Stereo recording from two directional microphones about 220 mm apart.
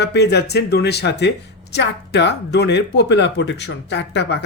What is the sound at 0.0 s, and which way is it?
Speech, 50° left (ahead or behind).